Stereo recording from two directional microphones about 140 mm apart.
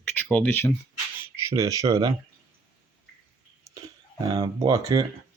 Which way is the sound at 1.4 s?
25° right (ahead or behind).